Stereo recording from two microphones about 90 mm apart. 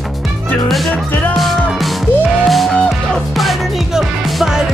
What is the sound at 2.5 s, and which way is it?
Music, centre (ahead or behind).